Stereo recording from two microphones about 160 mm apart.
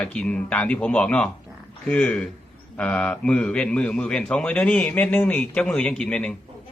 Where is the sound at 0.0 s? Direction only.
10° left (ahead or behind).